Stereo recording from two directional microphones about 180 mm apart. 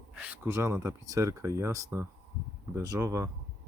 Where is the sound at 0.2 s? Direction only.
15° right (ahead or behind).